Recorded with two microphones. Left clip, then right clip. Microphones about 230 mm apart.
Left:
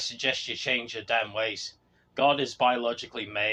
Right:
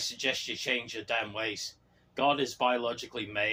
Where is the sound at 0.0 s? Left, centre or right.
Left.